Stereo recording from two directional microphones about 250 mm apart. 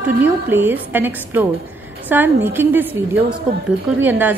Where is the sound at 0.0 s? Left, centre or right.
Centre.